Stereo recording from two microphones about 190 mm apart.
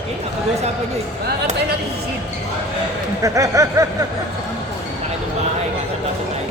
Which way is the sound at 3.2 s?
15° right (ahead or behind).